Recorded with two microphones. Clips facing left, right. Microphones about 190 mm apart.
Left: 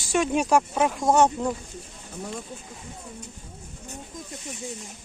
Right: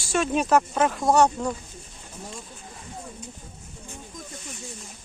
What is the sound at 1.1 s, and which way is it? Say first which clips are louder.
Speech: even; 20° left (ahead or behind).